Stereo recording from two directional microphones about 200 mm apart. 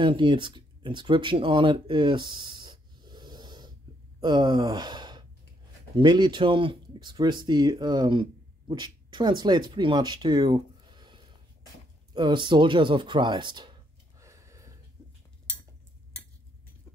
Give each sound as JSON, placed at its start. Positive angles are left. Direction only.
{"t": 0.0, "sound": "speech", "side_deg": -25}
{"t": 14.2, "sound": "gasp", "side_deg": -15}
{"t": 15.0, "sound": "a sound", "side_deg": -20}